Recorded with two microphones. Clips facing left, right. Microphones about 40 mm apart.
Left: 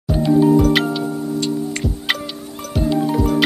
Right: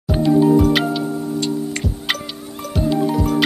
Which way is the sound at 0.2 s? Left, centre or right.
Centre.